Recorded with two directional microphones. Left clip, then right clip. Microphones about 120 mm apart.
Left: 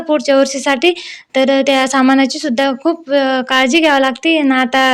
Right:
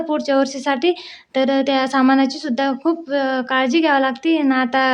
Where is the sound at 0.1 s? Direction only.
20° left (ahead or behind).